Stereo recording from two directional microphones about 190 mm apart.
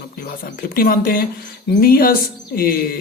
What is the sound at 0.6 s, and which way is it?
Speech, 50° left (ahead or behind).